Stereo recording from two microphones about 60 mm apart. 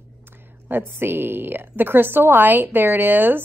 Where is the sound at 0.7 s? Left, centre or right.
Right.